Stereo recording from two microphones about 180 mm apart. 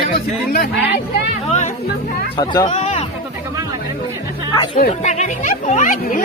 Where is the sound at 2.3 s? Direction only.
25° left (ahead or behind).